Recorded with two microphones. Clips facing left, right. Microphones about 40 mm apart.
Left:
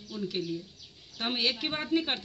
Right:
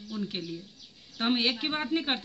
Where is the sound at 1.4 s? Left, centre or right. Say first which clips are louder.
Right 2 dB; centre.